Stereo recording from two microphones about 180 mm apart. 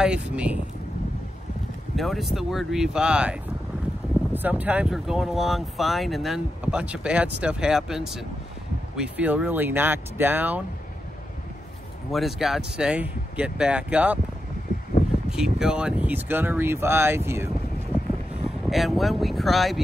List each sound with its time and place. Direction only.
0.0 s speech: 5° right (ahead or behind)
2.0 s speech: centre (ahead or behind)
12.1 s speech: centre (ahead or behind)
14.9 s a sound: 50° left (ahead or behind)
15.2 s speech: 5° right (ahead or behind)
18.7 s speech: centre (ahead or behind)